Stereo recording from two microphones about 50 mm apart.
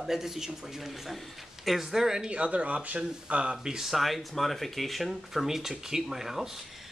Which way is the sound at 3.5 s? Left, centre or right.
Centre.